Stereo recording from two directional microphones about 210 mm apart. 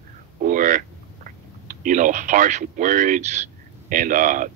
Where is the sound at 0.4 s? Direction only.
40° right (ahead or behind).